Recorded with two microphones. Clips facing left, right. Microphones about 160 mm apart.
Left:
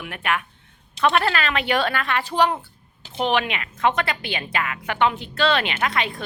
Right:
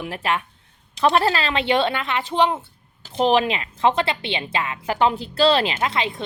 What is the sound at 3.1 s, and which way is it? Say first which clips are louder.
A woman's voice: right 4 dB; 35° right (ahead or behind).